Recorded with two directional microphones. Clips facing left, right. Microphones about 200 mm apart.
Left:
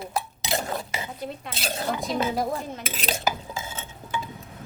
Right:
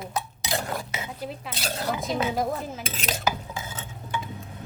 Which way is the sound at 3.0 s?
30° left (ahead or behind).